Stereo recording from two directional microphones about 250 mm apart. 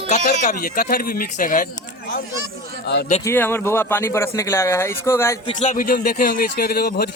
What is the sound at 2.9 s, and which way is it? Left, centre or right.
Speech, left.